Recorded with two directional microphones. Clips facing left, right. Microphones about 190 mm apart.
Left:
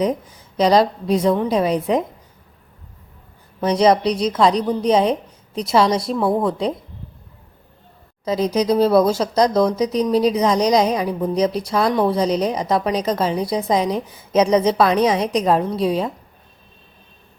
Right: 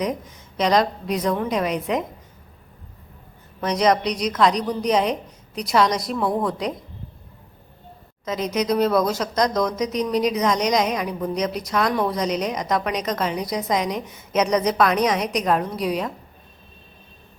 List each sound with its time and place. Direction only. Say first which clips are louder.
0.0 s speech: left 5 dB; 30° left (ahead or behind)
3.6 s a woman's voice: left 4 dB; 30° left (ahead or behind)
8.2 s a woman's voice: left 5 dB; 35° left (ahead or behind)